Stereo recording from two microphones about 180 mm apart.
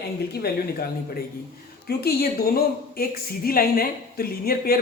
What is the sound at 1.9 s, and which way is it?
A woman's voice, 60° left (ahead or behind).